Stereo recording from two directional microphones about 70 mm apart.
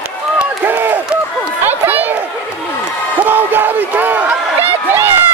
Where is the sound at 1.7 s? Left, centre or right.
Right.